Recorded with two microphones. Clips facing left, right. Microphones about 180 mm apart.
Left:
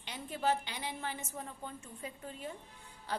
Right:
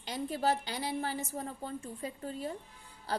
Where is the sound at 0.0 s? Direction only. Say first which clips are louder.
Right 3 dB; 40° right (ahead or behind).